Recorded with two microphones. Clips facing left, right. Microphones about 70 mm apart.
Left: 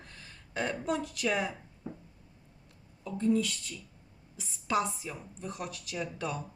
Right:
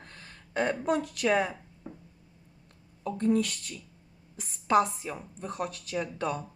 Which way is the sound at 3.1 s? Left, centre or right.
Right.